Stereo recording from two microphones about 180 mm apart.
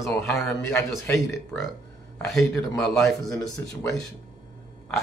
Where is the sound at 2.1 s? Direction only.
Centre (ahead or behind).